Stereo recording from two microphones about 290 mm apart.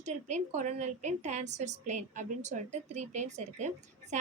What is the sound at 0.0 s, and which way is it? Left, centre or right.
A woman's voice, right.